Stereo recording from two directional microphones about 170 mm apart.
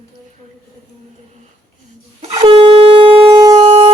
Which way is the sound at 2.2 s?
35° right (ahead or behind).